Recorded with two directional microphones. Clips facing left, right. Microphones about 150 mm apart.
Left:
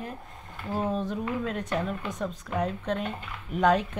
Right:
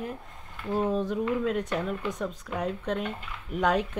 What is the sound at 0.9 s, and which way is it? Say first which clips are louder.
Speech: right 3 dB; 5° right (ahead or behind).